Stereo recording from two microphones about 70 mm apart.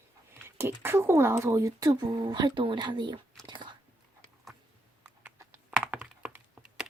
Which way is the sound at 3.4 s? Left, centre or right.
Right.